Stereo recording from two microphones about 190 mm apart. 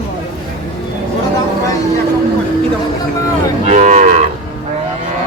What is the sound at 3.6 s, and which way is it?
Moo, 40° right (ahead or behind).